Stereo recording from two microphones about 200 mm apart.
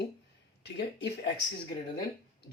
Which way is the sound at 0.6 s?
55° left (ahead or behind).